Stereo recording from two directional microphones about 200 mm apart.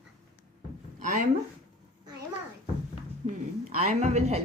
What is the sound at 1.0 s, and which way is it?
Speech, 40° right (ahead or behind).